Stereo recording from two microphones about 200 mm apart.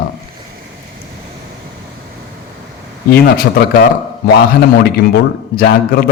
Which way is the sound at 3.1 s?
50° left (ahead or behind).